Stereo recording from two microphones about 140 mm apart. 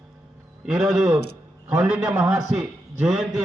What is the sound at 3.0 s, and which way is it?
Speech, 5° right (ahead or behind).